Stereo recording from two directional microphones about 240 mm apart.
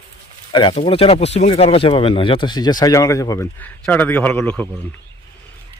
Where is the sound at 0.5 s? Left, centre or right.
Left.